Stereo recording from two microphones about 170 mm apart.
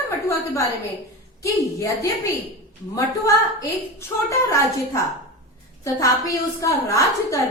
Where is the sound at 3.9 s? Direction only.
15° left (ahead or behind).